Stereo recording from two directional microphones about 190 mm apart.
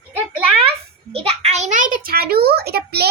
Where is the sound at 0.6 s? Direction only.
30° right (ahead or behind).